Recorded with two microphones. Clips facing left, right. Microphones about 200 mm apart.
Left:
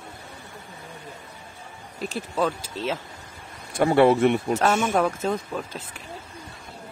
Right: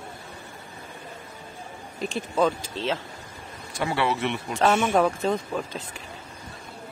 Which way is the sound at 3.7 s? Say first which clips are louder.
Left 9 dB; 45° left (ahead or behind).